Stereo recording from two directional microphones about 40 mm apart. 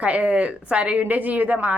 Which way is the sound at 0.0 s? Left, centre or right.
Right.